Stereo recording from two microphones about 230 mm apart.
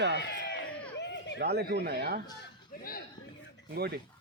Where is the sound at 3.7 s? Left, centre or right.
Right.